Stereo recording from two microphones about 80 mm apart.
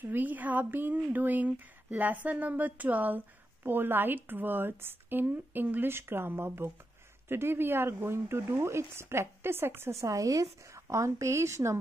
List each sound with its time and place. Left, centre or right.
0.0 s speech: right
9.9 s speech: right